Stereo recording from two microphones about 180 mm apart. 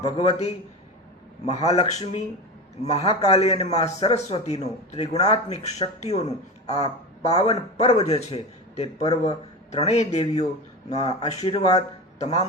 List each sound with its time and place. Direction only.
0.0 s a man's voice: 35° left (ahead or behind)